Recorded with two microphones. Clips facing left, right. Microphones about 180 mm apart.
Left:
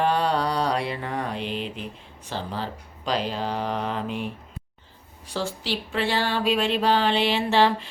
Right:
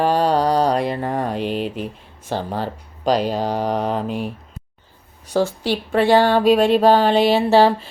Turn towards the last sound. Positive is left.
turn(degrees=-40)  # may be behind; listen again after turning